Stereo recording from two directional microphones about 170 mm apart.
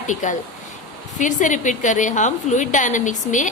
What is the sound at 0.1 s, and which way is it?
A woman's voice, 45° left (ahead or behind).